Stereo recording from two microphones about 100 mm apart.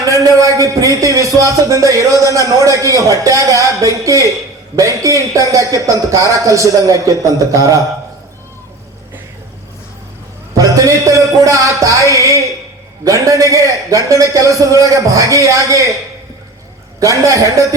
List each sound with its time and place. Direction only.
0.1 s a man's voice: 35° right (ahead or behind)
10.8 s a man's voice: 35° right (ahead or behind)
17.0 s a man's voice: 35° right (ahead or behind)